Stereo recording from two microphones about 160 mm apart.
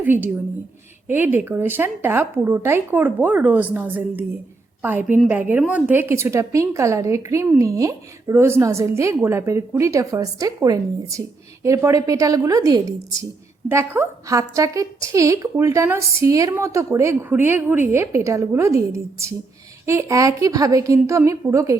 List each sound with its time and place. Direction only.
0.0 s a woman's voice: 10° right (ahead or behind)
19.8 s a woman's voice: 20° right (ahead or behind)